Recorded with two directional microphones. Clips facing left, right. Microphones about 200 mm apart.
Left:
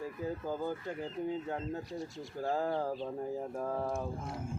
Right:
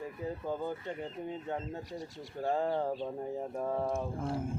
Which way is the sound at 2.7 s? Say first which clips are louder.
Right 1 dB; 20° right (ahead or behind).